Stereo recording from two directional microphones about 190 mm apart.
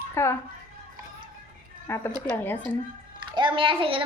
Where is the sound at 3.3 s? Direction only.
25° right (ahead or behind).